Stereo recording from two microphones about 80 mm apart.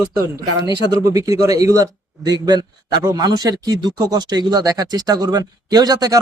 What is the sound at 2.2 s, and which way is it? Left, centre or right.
Speech, right.